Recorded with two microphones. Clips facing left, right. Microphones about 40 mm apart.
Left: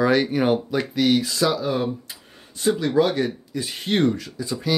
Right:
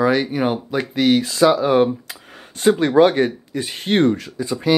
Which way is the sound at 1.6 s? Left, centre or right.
Right.